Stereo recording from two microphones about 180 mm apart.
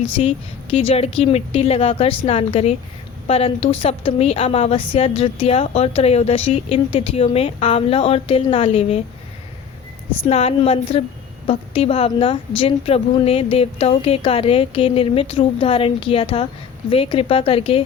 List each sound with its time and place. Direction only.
0.0 s a woman's voice: 30° left (ahead or behind)
10.2 s a woman's voice: 35° left (ahead or behind)